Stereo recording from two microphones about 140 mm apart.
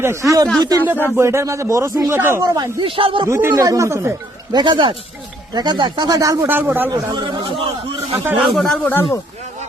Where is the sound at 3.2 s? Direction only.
20° right (ahead or behind).